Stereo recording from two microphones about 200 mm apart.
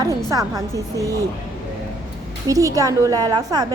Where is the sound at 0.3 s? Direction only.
15° right (ahead or behind).